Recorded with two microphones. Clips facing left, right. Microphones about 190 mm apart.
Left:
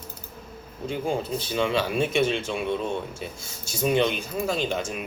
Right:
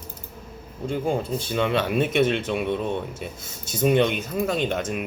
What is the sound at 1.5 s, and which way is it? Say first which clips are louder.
Speech: right 2 dB; centre (ahead or behind).